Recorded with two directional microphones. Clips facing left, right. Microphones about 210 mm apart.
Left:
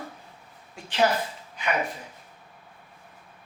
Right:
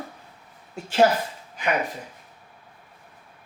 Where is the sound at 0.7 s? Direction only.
45° right (ahead or behind).